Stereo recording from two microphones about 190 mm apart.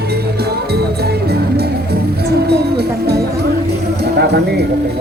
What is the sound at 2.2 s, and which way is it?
Speech, 55° right (ahead or behind).